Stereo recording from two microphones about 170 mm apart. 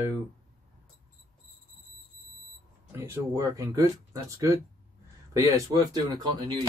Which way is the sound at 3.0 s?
15° right (ahead or behind).